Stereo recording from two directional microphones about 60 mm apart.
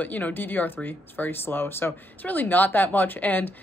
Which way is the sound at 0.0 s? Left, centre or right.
Left.